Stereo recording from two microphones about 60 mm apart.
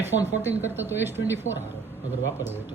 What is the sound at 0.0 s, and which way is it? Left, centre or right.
A woman's voice, right.